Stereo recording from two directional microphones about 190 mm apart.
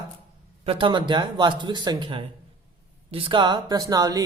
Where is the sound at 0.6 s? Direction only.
30° right (ahead or behind).